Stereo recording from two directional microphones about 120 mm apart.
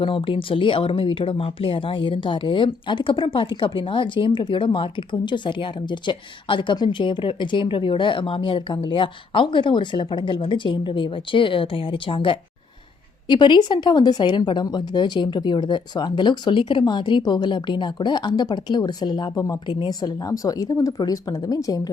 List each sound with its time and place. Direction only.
0.0 s a woman's voice: 45° left (ahead or behind)